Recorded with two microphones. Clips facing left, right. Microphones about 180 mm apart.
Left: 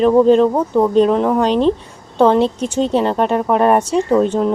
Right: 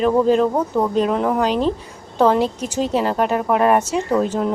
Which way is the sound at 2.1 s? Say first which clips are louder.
Left 3 dB; 25° left (ahead or behind).